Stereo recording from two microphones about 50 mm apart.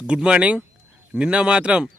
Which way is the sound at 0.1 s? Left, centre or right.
Right.